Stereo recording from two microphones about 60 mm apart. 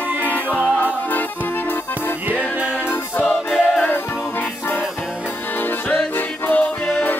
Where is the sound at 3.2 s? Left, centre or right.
Left.